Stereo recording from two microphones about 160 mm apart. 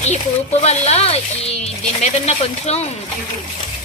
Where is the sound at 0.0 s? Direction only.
45° left (ahead or behind).